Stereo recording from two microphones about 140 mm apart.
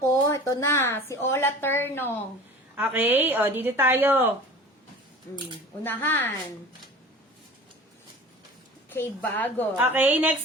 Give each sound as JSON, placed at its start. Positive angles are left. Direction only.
{"t": 0.3, "sound": "speech", "side_deg": 20}
{"t": 2.7, "sound": "a woman's voice", "side_deg": -15}
{"t": 5.8, "sound": "a woman's voice", "side_deg": 15}
{"t": 8.9, "sound": "a woman's voice", "side_deg": 15}
{"t": 9.7, "sound": "a woman's voice", "side_deg": -15}